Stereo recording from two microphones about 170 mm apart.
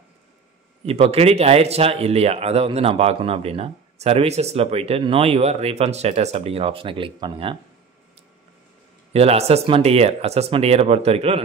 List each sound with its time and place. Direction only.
0.8 s speech: 35° right (ahead or behind)
9.1 s speech: 35° right (ahead or behind)